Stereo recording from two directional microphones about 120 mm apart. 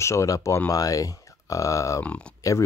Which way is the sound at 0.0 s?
25° left (ahead or behind).